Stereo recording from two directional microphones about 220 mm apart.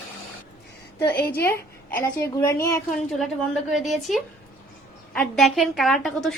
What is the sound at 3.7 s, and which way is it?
A woman's voice, centre (ahead or behind).